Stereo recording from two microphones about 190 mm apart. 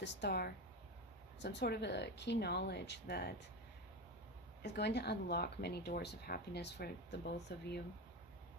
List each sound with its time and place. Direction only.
0.0 s speech: 65° left (ahead or behind)
4.6 s speech: 60° left (ahead or behind)